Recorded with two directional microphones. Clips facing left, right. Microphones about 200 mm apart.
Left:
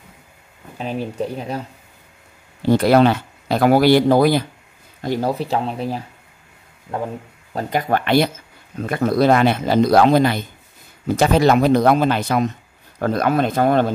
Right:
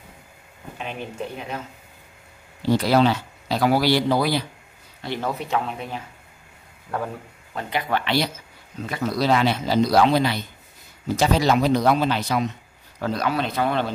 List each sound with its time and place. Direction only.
0.7 s speech: 35° left (ahead or behind)
2.6 s speech: 55° left (ahead or behind)
5.0 s speech: 40° left (ahead or behind)
6.9 s speech: 25° left (ahead or behind)
7.5 s speech: 45° left (ahead or behind)